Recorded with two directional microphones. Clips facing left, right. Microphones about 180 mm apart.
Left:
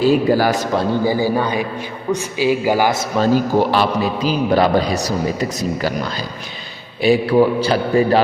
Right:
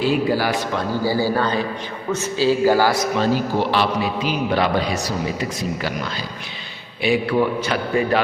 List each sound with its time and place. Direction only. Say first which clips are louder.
0.0 s a man's voice: left 5 dB; 40° left (ahead or behind)
1.0 s a man's voice: left 2 dB; 15° left (ahead or behind)
3.2 s a man's voice: left 4 dB; 45° left (ahead or behind)